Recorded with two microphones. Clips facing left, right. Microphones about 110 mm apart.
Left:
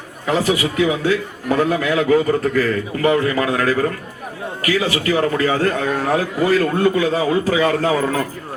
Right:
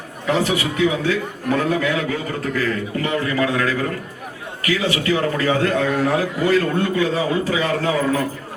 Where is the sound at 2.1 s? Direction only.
40° left (ahead or behind).